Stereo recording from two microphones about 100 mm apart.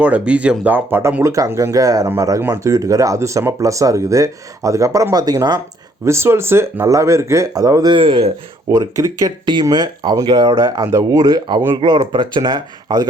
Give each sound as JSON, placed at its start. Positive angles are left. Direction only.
{"t": 0.0, "sound": "speech", "side_deg": -15}
{"t": 6.1, "sound": "speech", "side_deg": -25}
{"t": 7.9, "sound": "speech", "side_deg": -65}
{"t": 8.7, "sound": "speech", "side_deg": -35}
{"t": 9.6, "sound": "speech", "side_deg": -45}